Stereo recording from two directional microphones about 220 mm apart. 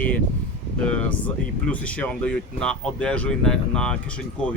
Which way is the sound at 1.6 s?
5° left (ahead or behind).